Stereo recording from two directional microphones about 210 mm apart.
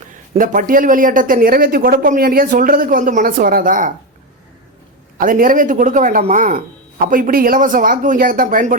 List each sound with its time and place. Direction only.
0.3 s speech: 40° right (ahead or behind)
5.1 s speech: 40° right (ahead or behind)